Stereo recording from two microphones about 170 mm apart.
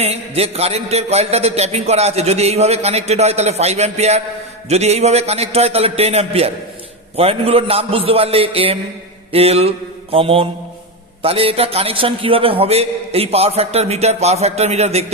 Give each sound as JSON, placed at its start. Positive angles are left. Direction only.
{"t": 0.0, "sound": "a man's voice", "side_deg": -35}